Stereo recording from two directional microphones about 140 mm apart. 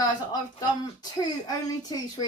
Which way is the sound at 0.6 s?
30° left (ahead or behind).